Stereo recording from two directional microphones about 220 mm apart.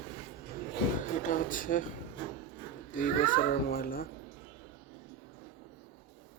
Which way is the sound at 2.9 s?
40° left (ahead or behind).